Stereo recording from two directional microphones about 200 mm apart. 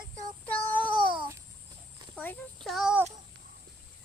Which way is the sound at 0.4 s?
10° left (ahead or behind).